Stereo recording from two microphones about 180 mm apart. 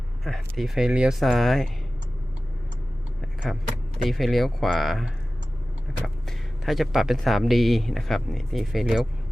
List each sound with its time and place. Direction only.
0.3 s speech: centre (ahead or behind)
3.2 s speech: centre (ahead or behind)